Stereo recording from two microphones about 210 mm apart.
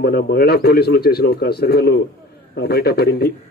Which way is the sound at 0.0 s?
50° left (ahead or behind).